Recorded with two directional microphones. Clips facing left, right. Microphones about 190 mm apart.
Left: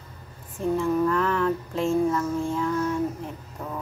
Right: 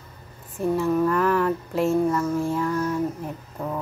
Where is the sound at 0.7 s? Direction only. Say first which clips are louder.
Right 1 dB; 5° right (ahead or behind).